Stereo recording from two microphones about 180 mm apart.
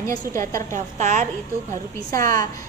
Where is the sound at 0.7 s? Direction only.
40° right (ahead or behind).